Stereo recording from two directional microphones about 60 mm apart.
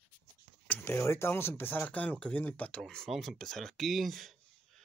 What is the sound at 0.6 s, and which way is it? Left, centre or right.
Speech, left.